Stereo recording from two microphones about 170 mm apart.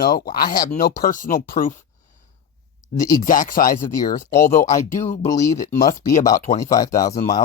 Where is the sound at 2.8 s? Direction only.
20° left (ahead or behind).